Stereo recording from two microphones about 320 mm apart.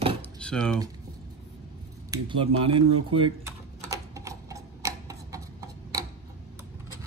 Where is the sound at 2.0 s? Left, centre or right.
Centre.